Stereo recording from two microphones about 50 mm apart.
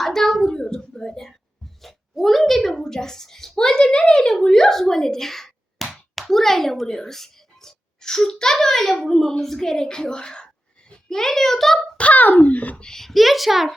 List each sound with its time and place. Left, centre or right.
0.0 s a sound: centre
6.1 s speech: centre
9.4 s a sound: centre
11.2 s a child's voice: centre
11.9 s a child's voice: left
12.7 s a child's voice: centre